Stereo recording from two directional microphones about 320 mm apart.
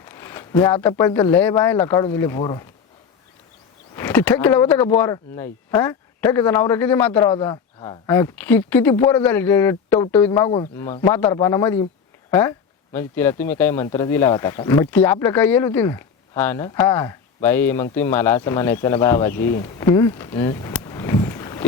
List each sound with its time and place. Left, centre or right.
0.0 s speech: centre
3.9 s speech: centre